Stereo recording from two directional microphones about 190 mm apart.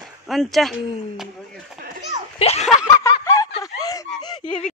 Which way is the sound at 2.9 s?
15° left (ahead or behind).